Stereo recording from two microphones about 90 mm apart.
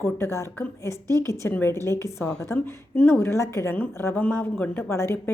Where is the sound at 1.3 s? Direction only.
30° left (ahead or behind).